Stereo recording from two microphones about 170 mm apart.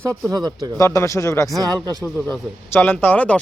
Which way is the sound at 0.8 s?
20° left (ahead or behind).